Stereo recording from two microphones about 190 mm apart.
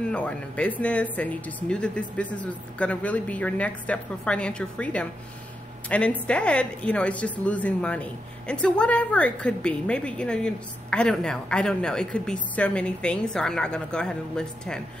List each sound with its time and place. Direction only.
0.0 s a woman's voice: 5° left (ahead or behind)